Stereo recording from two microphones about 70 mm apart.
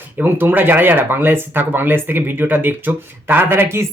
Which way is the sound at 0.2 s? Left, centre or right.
Right.